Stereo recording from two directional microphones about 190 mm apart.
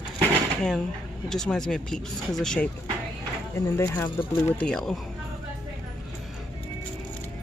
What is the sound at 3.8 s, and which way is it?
Speech, 20° left (ahead or behind).